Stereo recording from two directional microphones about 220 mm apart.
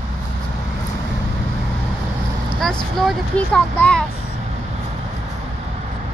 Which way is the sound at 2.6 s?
Centre (ahead or behind).